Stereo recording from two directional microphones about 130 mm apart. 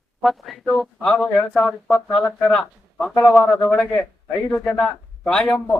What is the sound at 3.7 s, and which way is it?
Speech, 10° left (ahead or behind).